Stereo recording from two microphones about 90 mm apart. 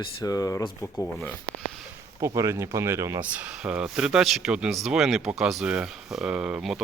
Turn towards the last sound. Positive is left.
turn(degrees=-5)  # may be behind; listen again after turning